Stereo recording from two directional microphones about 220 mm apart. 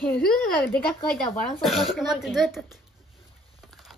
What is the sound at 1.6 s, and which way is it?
Speech, centre (ahead or behind).